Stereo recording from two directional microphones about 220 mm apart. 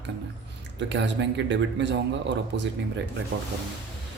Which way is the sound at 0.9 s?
55° right (ahead or behind).